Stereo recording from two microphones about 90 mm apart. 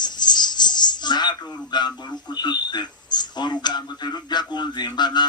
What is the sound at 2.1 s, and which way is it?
Speech, 55° left (ahead or behind).